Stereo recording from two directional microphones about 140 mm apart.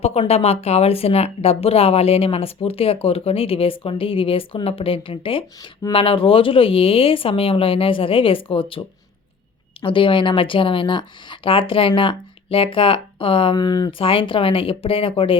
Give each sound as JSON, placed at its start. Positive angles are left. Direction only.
{"t": 0.0, "sound": "speech", "side_deg": 45}
{"t": 9.8, "sound": "speech", "side_deg": 40}